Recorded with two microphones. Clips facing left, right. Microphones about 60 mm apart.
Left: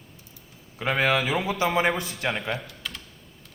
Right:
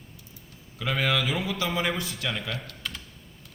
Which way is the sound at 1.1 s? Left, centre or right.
Left.